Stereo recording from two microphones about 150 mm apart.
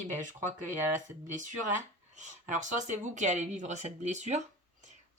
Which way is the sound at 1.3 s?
55° right (ahead or behind).